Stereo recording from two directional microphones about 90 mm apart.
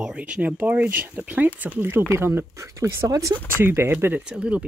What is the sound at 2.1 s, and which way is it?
Speech, 25° right (ahead or behind).